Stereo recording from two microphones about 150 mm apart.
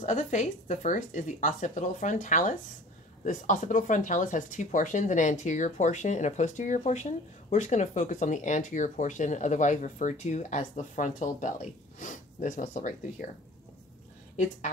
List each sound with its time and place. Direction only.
0.0 s speech: 55° left (ahead or behind)